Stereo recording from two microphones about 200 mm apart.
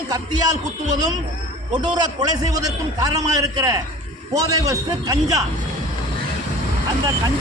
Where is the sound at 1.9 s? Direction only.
20° right (ahead or behind).